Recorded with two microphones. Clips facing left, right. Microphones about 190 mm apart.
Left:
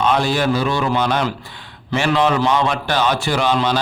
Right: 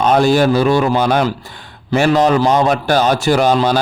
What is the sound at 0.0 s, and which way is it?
A man's voice, 45° right (ahead or behind).